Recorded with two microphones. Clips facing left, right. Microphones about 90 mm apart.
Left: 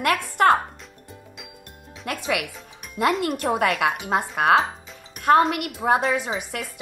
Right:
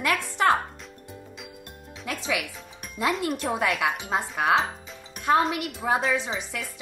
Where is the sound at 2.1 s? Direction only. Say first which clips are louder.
Left 3 dB; 55° left (ahead or behind).